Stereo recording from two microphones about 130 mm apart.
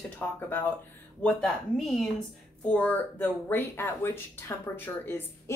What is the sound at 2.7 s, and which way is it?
Speech, 15° left (ahead or behind).